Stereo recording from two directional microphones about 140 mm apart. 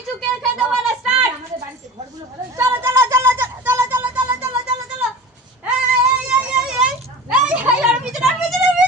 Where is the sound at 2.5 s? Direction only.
15° right (ahead or behind).